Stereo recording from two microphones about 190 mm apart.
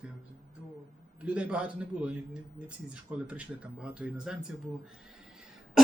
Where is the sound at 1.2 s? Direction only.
5° right (ahead or behind).